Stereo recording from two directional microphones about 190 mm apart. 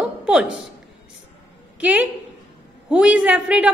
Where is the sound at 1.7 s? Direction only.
5° right (ahead or behind).